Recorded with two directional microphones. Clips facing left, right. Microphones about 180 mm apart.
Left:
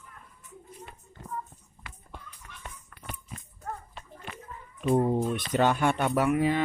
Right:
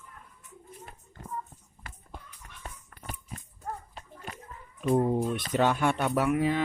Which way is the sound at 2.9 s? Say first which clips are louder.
Even; 40° right (ahead or behind).